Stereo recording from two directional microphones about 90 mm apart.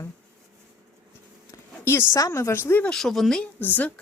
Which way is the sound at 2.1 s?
35° left (ahead or behind).